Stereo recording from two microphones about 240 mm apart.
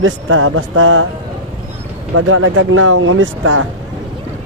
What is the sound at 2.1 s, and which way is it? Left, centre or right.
Speech, right.